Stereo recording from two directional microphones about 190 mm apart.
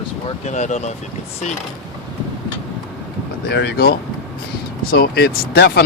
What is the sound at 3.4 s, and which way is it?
Speech, 60° left (ahead or behind).